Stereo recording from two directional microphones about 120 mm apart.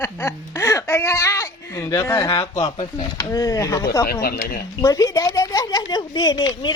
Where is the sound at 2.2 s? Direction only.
40° left (ahead or behind).